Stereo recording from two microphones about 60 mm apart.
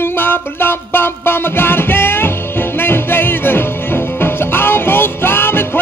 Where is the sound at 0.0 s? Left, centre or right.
Left.